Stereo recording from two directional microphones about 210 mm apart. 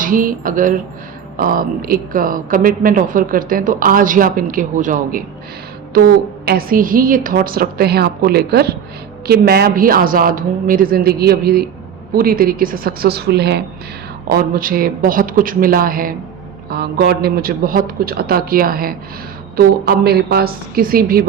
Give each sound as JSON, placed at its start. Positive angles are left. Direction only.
{"t": 0.0, "sound": "a man's voice", "side_deg": -40}